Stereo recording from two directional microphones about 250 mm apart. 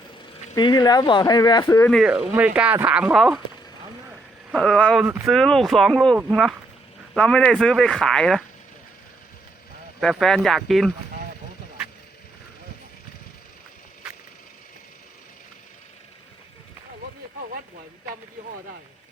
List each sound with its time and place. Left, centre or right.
0.5 s speech: centre
1.9 s speech: centre
4.5 s speech: centre
10.0 s speech: centre